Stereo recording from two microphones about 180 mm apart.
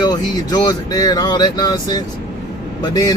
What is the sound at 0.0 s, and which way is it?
Speech, 20° left (ahead or behind).